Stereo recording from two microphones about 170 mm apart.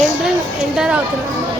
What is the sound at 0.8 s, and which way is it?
Speech, 5° right (ahead or behind).